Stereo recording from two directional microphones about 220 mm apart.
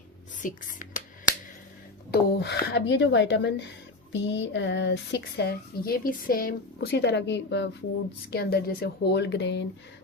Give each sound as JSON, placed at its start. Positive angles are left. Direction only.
{"t": 0.4, "sound": "speech", "side_deg": 35}
{"t": 2.0, "sound": "a woman's voice", "side_deg": 45}